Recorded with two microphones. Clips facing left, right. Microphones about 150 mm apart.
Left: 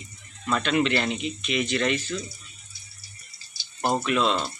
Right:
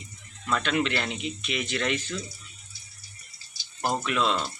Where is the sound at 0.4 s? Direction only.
15° left (ahead or behind).